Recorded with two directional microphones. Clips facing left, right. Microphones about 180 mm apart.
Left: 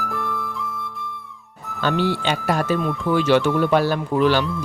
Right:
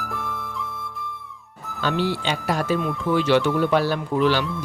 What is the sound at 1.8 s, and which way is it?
Speech, 55° left (ahead or behind).